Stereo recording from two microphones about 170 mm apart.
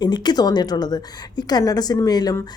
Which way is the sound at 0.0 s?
25° left (ahead or behind).